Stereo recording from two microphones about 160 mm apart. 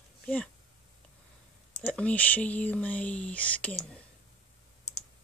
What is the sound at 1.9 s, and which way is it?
Speech, 10° left (ahead or behind).